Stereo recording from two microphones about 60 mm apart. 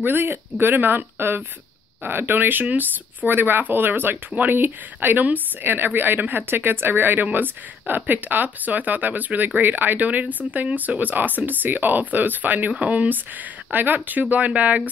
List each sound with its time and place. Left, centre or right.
0.0 s speech: right